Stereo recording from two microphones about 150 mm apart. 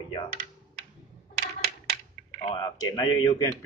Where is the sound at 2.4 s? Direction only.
30° left (ahead or behind).